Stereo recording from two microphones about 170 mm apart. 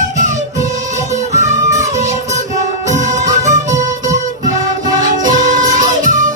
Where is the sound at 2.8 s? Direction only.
45° right (ahead or behind).